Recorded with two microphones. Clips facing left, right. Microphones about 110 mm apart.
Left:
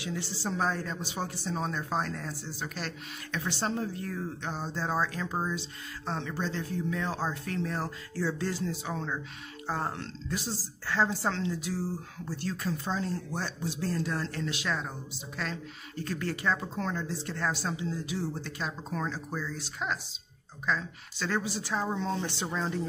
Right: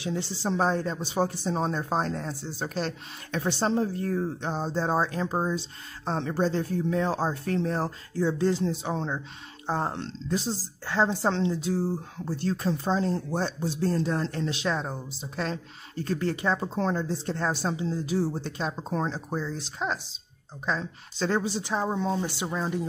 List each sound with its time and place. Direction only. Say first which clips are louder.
0.0 s speech: right 5 dB; 25° right (ahead or behind)
8.1 s speech: right 7 dB; 20° right (ahead or behind)